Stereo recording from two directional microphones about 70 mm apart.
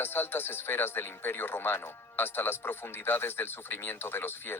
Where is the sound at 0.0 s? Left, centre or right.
Left.